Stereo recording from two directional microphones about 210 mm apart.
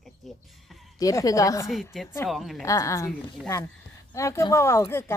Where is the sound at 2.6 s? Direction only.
15° left (ahead or behind).